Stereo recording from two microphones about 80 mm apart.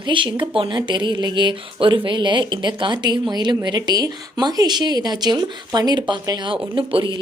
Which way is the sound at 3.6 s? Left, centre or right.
Right.